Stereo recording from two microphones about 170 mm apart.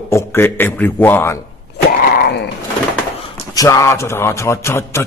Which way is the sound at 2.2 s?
70° left (ahead or behind).